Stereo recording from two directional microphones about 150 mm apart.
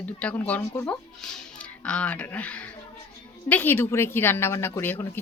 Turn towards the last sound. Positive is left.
turn(degrees=15)  # may be behind; listen again after turning